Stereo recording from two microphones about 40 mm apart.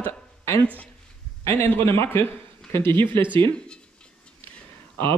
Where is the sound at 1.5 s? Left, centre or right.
Left.